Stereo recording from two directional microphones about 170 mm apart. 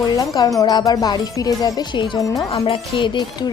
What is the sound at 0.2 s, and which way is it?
Speech, 20° left (ahead or behind).